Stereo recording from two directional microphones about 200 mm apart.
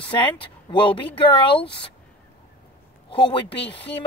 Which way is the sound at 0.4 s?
25° left (ahead or behind).